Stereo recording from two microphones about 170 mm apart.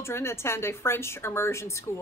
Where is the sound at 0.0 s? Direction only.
15° left (ahead or behind).